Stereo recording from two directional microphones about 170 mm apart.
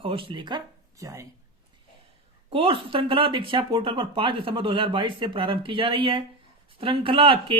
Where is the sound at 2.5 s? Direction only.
30° right (ahead or behind).